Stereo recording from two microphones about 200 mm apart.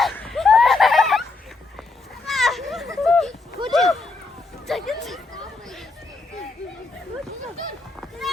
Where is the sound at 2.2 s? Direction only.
Centre (ahead or behind).